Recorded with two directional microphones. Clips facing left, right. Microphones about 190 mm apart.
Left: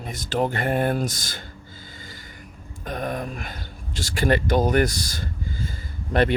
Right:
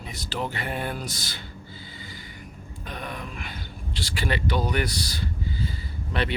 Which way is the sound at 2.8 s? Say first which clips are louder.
Left 8 dB; 45° left (ahead or behind).